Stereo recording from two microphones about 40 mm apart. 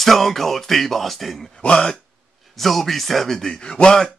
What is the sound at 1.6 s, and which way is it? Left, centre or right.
Speech, left.